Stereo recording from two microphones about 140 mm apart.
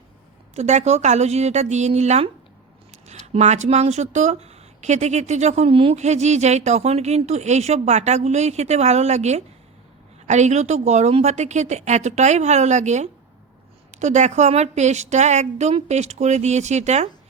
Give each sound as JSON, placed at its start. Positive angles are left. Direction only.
{"t": 0.5, "sound": "speech", "side_deg": -55}
{"t": 3.3, "sound": "speech", "side_deg": -55}